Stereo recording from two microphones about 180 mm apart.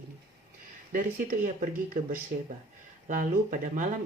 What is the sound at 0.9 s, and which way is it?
Speech, 50° right (ahead or behind).